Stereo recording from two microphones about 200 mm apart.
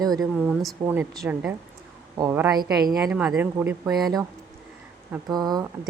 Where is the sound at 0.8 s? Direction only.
15° right (ahead or behind).